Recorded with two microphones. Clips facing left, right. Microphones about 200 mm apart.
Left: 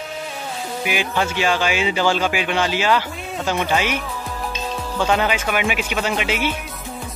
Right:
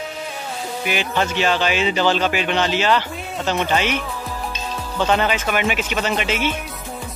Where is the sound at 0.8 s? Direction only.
10° left (ahead or behind).